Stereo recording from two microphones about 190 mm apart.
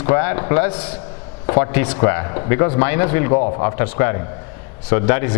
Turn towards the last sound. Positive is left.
turn(degrees=15)  # may be behind; listen again after turning